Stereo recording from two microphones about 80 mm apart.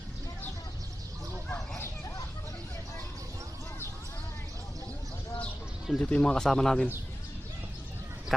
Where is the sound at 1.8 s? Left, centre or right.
Left.